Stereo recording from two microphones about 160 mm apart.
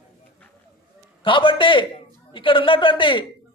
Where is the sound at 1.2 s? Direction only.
30° left (ahead or behind).